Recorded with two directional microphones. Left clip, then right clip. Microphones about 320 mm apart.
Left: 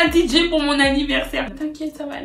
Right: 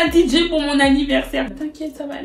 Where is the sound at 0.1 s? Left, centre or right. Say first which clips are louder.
Right 1 dB; centre.